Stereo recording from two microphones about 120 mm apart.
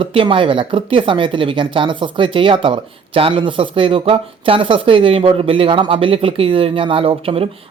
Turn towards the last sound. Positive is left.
turn(degrees=-50)  # may be behind; listen again after turning